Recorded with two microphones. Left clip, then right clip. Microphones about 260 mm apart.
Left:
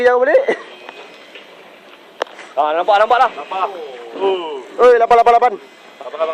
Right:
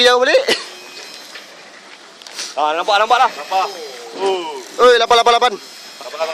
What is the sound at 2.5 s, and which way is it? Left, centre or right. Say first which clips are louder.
A man's voice: left 2 dB; right.